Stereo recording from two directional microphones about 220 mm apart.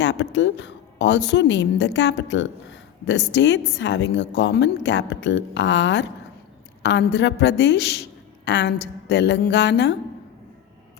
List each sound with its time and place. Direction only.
0.0 s a woman's voice: 55° left (ahead or behind)